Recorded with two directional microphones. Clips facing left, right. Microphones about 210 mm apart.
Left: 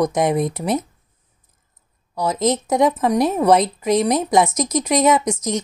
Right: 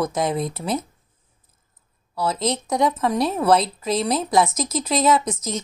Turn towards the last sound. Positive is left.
turn(degrees=15)  # may be behind; listen again after turning